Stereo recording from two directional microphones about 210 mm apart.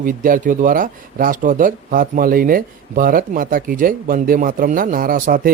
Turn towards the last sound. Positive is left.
turn(degrees=-40)  # may be behind; listen again after turning